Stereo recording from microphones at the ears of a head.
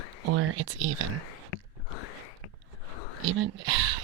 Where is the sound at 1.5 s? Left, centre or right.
Left.